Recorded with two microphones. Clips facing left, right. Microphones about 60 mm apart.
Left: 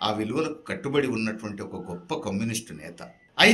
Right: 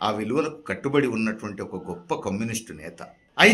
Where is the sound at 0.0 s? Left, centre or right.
Centre.